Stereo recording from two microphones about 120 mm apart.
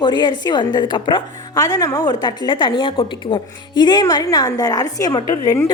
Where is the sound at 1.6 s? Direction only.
30° left (ahead or behind).